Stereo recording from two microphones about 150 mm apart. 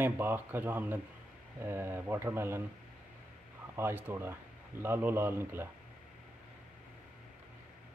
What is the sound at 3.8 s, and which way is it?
Speech, 15° right (ahead or behind).